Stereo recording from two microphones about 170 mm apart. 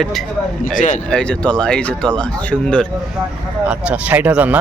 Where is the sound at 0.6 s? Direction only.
50° left (ahead or behind).